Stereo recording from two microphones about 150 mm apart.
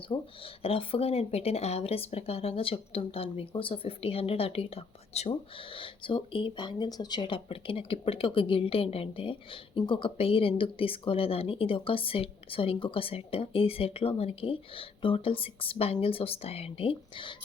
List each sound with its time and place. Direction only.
0.1 s speech: 40° left (ahead or behind)